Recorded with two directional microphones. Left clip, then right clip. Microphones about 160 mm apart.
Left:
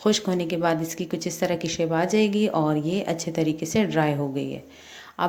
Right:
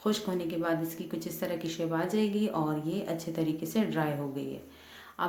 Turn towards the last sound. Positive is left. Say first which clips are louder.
# left 7 dB
turn(degrees=35)  # may be behind; listen again after turning